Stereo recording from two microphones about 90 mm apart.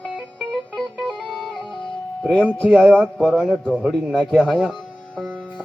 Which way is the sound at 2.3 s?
15° left (ahead or behind).